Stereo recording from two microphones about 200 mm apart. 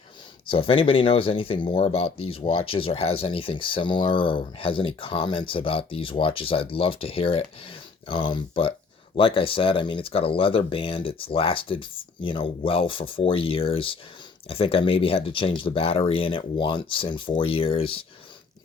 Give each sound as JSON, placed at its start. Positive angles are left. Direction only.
{"t": 0.4, "sound": "speech", "side_deg": 25}